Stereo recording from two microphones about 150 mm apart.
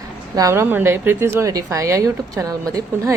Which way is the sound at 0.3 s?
20° right (ahead or behind).